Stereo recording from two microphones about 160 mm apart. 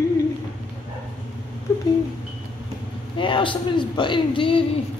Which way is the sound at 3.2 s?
30° left (ahead or behind).